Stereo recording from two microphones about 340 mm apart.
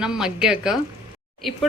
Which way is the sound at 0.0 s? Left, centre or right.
Centre.